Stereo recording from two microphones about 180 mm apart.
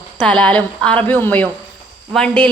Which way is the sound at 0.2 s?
5° left (ahead or behind).